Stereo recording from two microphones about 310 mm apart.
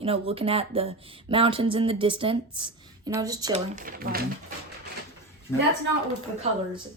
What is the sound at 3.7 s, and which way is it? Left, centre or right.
Speech, right.